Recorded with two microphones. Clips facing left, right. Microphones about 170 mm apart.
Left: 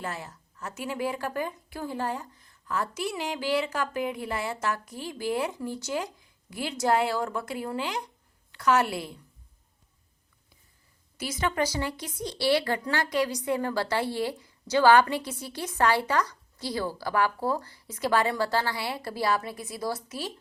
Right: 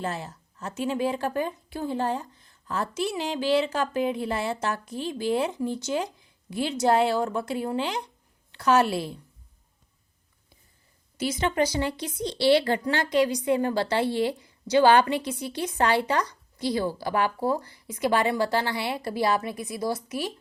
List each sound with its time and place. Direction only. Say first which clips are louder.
0.0 s a woman's voice: right 4 dB; 25° right (ahead or behind)
11.2 s a woman's voice: right 3 dB; 25° right (ahead or behind)